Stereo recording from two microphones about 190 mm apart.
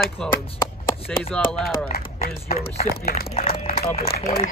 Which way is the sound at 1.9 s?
50° left (ahead or behind).